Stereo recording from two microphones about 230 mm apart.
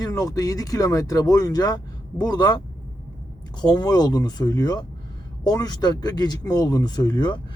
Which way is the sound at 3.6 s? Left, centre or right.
Centre.